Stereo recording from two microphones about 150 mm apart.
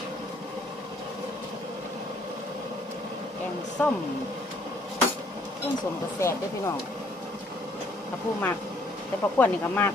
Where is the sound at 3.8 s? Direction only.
10° left (ahead or behind).